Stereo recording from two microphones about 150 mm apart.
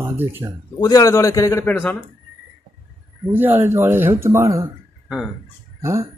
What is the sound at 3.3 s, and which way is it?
Speech, 15° right (ahead or behind).